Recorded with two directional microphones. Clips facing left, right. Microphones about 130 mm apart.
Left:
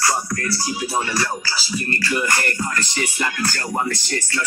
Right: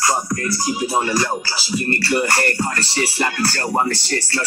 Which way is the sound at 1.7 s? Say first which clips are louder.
Right 5 dB; 35° right (ahead or behind).